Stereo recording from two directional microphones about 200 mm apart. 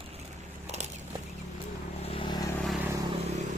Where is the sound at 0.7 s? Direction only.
35° right (ahead or behind).